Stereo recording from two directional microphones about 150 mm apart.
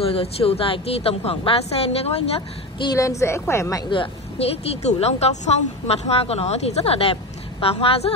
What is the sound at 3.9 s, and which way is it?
Speech, 40° left (ahead or behind).